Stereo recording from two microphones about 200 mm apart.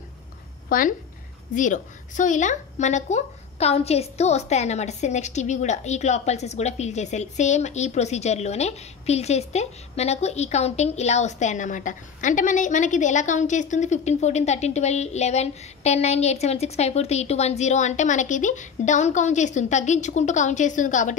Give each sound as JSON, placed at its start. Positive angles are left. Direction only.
{"t": 0.7, "sound": "a woman's voice", "side_deg": 45}